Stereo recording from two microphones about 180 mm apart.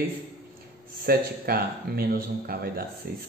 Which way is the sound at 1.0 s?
55° right (ahead or behind).